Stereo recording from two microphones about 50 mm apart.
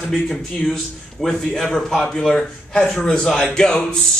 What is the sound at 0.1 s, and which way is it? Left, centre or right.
A man's voice, centre.